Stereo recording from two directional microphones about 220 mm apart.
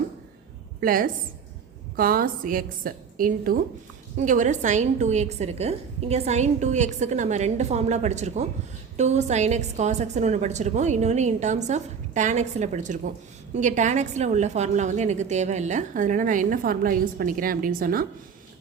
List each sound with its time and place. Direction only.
0.8 s a woman's voice: 40° right (ahead or behind)